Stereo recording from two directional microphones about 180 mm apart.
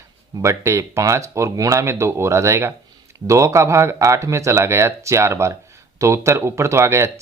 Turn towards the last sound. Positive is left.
turn(degrees=-15)  # may be behind; listen again after turning